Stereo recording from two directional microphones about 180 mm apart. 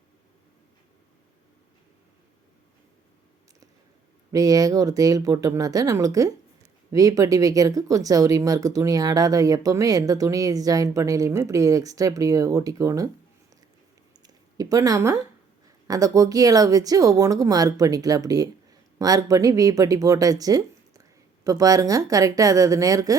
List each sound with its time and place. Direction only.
4.3 s speech: 20° right (ahead or behind)
14.2 s a sound: 20° right (ahead or behind)
15.9 s speech: 20° right (ahead or behind)